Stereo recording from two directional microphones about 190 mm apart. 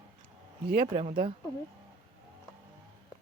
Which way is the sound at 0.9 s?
30° right (ahead or behind).